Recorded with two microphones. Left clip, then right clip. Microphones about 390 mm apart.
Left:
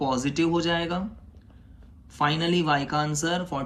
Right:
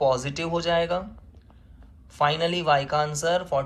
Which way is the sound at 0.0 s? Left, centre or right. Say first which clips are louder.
Right 2 dB; centre.